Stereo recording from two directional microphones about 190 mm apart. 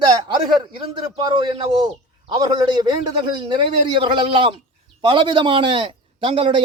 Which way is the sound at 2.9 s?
25° right (ahead or behind).